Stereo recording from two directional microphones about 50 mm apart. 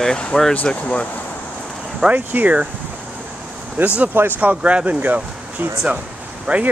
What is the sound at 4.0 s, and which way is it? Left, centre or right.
Speech, right.